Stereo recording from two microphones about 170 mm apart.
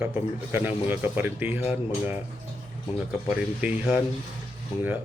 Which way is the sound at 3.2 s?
10° right (ahead or behind).